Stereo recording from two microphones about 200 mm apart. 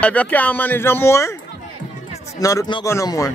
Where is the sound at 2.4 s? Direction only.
15° left (ahead or behind).